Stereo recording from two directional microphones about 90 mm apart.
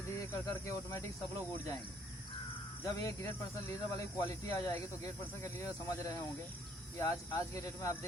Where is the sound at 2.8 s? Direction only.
35° left (ahead or behind).